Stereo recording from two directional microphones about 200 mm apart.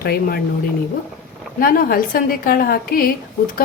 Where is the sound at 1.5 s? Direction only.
45° left (ahead or behind).